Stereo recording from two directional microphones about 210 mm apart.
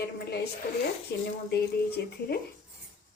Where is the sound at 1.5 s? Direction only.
50° left (ahead or behind).